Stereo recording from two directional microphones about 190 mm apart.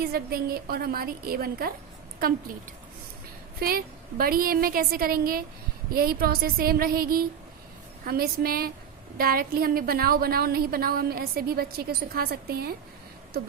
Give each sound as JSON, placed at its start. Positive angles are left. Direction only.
{"t": 0.0, "sound": "a woman's voice", "side_deg": -55}
{"t": 3.6, "sound": "a woman's voice", "side_deg": -50}